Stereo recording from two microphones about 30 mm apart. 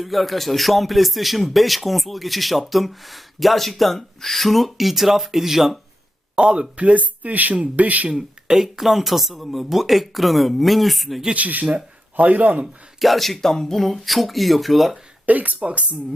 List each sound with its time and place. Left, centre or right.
0.0 s speech: centre
6.3 s speech: right
6.7 s speech: right
8.1 s speech: centre
11.3 s speech: right
13.0 s speech: centre
13.4 s speech: centre
15.3 s speech: right
15.6 s speech: right